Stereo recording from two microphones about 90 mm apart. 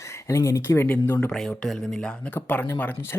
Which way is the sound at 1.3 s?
5° left (ahead or behind).